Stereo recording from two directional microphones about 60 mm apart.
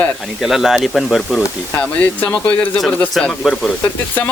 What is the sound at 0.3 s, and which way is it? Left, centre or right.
Speech, centre.